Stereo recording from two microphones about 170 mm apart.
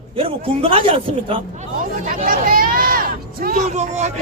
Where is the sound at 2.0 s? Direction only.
55° right (ahead or behind).